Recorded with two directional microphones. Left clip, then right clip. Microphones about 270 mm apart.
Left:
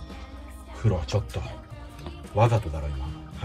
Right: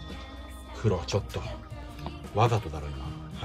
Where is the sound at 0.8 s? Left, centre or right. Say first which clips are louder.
Even; centre.